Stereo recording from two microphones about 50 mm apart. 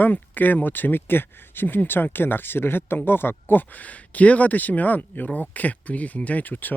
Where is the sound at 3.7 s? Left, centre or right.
Left.